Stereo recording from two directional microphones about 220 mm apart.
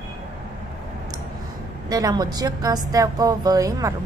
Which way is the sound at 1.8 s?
15° right (ahead or behind).